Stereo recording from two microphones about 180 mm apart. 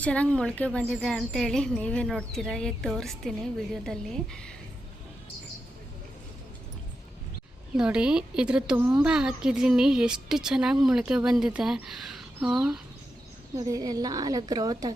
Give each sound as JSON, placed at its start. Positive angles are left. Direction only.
{"t": 0.0, "sound": "a woman's voice", "side_deg": 5}
{"t": 7.8, "sound": "a woman's voice", "side_deg": -5}
{"t": 13.6, "sound": "a woman's voice", "side_deg": -20}